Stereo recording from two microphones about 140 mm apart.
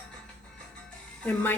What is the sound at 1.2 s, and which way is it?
Speech, 15° left (ahead or behind).